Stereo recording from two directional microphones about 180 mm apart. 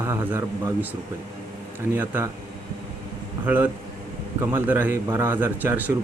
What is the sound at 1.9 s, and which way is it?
Speech, 10° right (ahead or behind).